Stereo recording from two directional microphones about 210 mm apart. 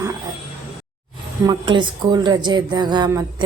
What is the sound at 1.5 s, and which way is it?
Speech, 20° right (ahead or behind).